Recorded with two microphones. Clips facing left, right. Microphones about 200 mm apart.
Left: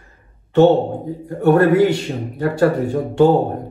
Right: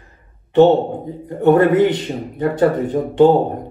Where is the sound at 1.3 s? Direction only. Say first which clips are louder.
Right 1 dB; 20° right (ahead or behind).